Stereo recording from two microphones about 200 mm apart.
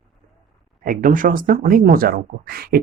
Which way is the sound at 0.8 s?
45° right (ahead or behind).